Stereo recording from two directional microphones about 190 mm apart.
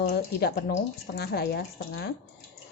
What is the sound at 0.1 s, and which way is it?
Speech, 60° left (ahead or behind).